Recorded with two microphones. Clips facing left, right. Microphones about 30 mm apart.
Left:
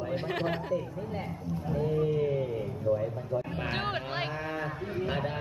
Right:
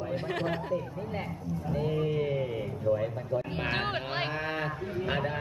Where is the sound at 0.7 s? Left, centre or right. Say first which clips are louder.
Even; centre.